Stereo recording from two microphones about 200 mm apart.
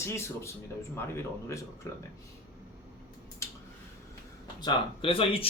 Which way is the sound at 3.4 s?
15° left (ahead or behind).